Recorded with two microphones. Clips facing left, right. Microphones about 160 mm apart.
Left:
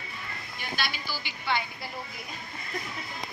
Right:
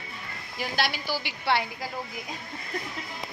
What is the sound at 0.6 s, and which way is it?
A woman's voice, 85° right.